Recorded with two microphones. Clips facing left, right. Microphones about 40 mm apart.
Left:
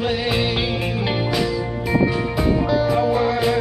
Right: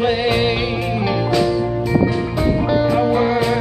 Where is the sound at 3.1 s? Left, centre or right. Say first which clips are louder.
Right 3 dB; right.